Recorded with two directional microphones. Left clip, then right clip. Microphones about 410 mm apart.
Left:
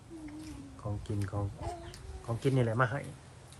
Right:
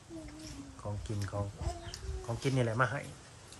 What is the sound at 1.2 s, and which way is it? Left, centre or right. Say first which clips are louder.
Speech: right 1 dB; centre.